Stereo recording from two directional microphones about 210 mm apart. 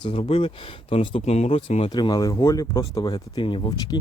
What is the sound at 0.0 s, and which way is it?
Speech, 25° left (ahead or behind).